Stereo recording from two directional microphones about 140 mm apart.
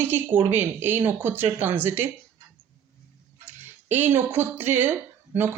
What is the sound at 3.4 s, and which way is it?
Speech, 15° right (ahead or behind).